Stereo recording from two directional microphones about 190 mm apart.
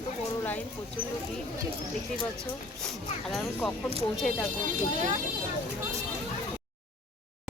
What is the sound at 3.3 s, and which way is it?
Speech, 5° left (ahead or behind).